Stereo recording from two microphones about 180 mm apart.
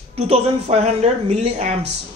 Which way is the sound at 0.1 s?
35° right (ahead or behind).